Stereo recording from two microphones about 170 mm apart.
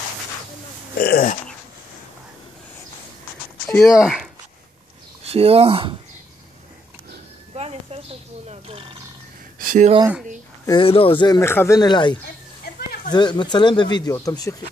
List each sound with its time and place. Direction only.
0.9 s speech: 60° left (ahead or behind)
3.6 s speech: centre (ahead or behind)
5.2 s speech: 35° right (ahead or behind)
7.5 s a sound: 35° right (ahead or behind)
8.5 s speech: 40° right (ahead or behind)
9.6 s a sound: 55° right (ahead or behind)
10.7 s speech: 30° left (ahead or behind)
12.6 s a sound: 70° left (ahead or behind)
13.1 s speech: 25° left (ahead or behind)